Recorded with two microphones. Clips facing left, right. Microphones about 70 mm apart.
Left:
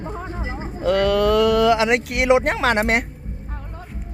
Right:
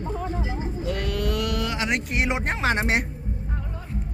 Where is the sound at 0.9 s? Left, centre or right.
Left.